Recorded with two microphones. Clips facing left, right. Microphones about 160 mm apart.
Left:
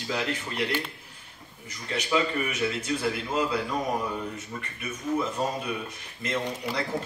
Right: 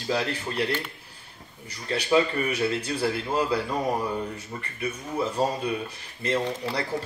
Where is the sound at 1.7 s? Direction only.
30° right (ahead or behind).